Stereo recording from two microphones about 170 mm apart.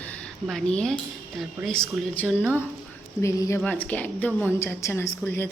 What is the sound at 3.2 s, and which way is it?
A woman's voice, 20° left (ahead or behind).